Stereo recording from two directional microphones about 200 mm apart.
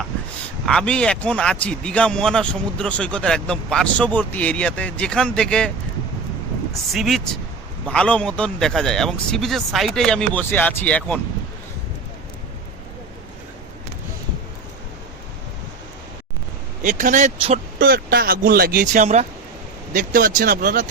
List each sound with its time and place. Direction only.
0.6 s speech: 5° left (ahead or behind)
6.9 s speech: centre (ahead or behind)
16.8 s speech: 40° right (ahead or behind)
17.8 s speech: 45° right (ahead or behind)